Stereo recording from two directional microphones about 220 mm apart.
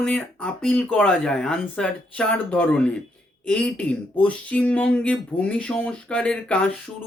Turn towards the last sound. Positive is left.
turn(degrees=5)  # may be behind; listen again after turning